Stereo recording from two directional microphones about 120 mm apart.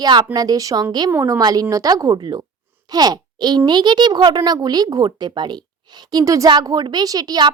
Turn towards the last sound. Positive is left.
turn(degrees=-30)  # may be behind; listen again after turning